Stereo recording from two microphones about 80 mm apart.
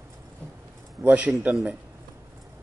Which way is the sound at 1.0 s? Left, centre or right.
Centre.